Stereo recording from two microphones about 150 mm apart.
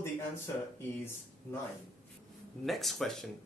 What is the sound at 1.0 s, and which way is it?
Speech, 15° left (ahead or behind).